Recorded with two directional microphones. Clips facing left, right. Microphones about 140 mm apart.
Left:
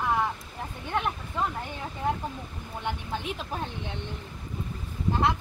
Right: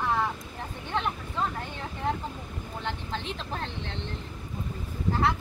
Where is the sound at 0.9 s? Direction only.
10° left (ahead or behind).